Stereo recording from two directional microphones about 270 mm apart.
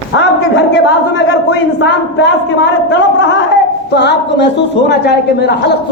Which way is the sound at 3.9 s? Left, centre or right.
Left.